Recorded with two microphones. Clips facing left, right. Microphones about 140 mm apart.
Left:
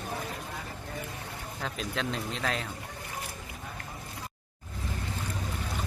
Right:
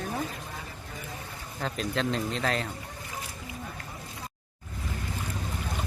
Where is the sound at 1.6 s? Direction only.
Centre (ahead or behind).